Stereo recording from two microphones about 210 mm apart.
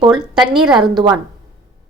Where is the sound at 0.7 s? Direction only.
20° right (ahead or behind).